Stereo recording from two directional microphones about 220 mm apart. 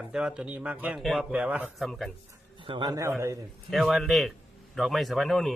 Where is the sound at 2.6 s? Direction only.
20° right (ahead or behind).